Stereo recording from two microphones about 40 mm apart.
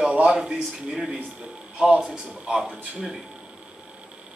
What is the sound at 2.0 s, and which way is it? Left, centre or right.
Speech, centre.